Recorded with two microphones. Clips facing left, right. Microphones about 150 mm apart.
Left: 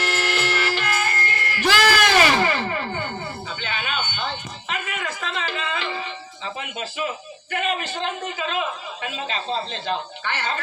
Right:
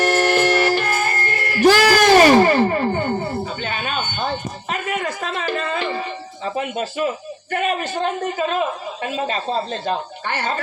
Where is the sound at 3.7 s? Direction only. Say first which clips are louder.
Right 3 dB; 45° right (ahead or behind).